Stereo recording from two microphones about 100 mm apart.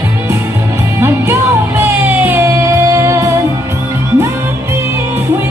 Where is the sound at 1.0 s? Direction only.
25° right (ahead or behind).